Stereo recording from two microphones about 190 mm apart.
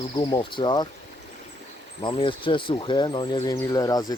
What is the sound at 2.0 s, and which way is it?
Speech, 25° left (ahead or behind).